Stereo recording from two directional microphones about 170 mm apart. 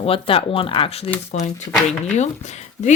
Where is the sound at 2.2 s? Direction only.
40° left (ahead or behind).